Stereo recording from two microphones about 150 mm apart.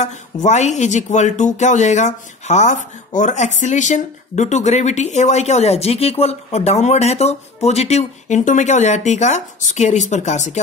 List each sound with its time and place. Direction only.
0.0 s speech: 50° left (ahead or behind)